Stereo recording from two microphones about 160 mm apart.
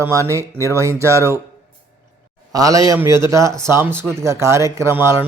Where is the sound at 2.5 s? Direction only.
20° right (ahead or behind).